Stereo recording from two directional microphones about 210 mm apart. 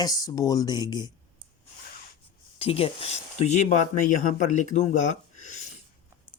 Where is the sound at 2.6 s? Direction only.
25° left (ahead or behind).